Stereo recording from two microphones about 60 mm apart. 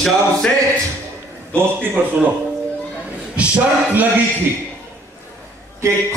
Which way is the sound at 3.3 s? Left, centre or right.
Right.